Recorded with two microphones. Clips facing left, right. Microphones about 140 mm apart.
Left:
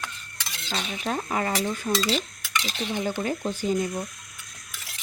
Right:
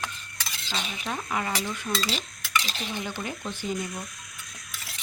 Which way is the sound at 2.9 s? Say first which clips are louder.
Left 7 dB; 45° left (ahead or behind).